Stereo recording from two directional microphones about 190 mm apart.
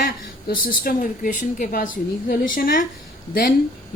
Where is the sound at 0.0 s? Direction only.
45° left (ahead or behind).